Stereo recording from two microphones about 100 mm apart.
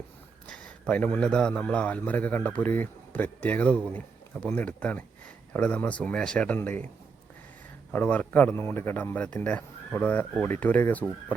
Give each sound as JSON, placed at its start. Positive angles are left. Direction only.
{"t": 0.4, "sound": "a man's voice", "side_deg": 10}
{"t": 7.9, "sound": "a man's voice", "side_deg": 15}